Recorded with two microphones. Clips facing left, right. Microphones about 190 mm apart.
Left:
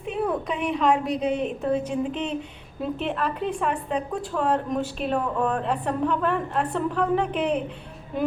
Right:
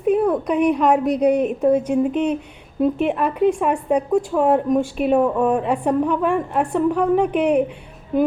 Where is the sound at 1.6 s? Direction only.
60° right (ahead or behind).